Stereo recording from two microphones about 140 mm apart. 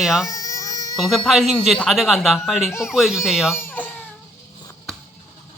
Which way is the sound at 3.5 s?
15° left (ahead or behind).